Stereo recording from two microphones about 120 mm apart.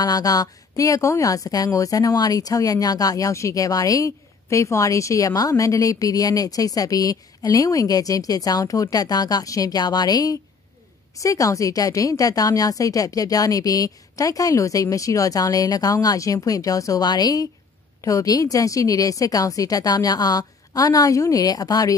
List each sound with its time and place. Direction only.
0.0 s a woman's voice: 30° left (ahead or behind)